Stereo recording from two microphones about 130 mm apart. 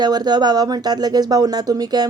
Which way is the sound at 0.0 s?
30° right (ahead or behind).